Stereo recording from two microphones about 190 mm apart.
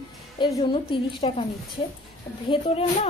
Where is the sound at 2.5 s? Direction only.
30° left (ahead or behind).